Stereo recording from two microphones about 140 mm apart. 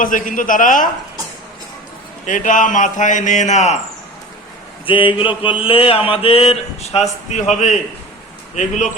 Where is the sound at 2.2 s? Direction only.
65° left (ahead or behind).